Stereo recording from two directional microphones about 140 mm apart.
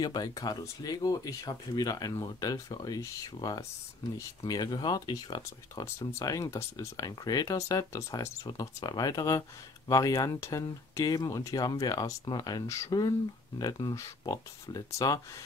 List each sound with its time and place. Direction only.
0.0 s speech: 30° left (ahead or behind)